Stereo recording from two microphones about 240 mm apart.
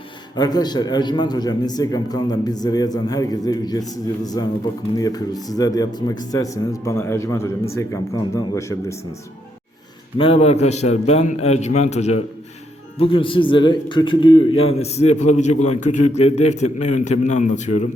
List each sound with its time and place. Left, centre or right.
0.3 s a man's voice: centre
10.2 s a man's voice: left